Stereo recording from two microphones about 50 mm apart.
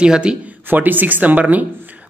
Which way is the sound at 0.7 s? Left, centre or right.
Right.